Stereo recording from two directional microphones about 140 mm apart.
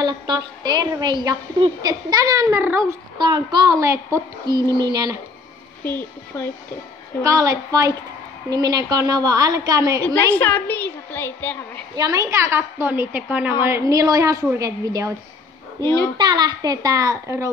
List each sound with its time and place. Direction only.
0.0 s a woman's voice: 30° right (ahead or behind)
5.9 s a woman's voice: 15° left (ahead or behind)
7.2 s a woman's voice: 25° right (ahead or behind)
10.3 s a woman's voice: 10° left (ahead or behind)
11.9 s a woman's voice: 25° right (ahead or behind)